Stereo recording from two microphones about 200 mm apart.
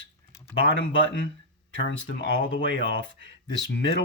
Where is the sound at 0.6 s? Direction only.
65° left (ahead or behind).